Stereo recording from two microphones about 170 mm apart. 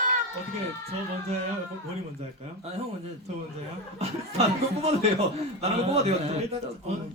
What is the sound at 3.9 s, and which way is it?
Speech, 40° right (ahead or behind).